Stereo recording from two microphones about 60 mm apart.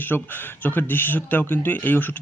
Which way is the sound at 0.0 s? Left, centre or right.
Left.